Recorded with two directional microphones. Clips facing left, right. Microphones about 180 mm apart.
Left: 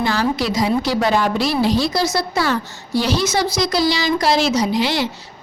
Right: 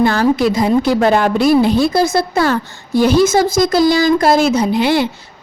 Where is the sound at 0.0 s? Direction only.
50° right (ahead or behind).